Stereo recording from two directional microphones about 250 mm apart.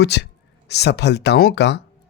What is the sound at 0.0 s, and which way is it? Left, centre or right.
Speech, left.